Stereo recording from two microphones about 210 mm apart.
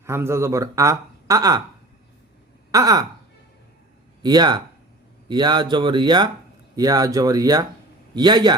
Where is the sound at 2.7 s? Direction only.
20° right (ahead or behind).